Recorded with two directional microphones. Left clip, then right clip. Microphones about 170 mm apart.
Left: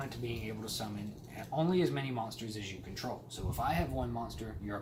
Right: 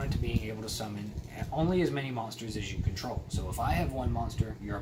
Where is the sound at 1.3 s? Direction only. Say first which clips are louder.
Right 2 dB; 5° right (ahead or behind).